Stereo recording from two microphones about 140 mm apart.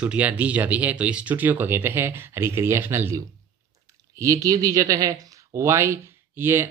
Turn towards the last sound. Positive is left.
turn(degrees=-15)  # may be behind; listen again after turning